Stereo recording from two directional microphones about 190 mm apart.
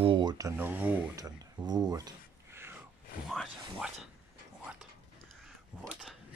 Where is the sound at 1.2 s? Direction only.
20° right (ahead or behind).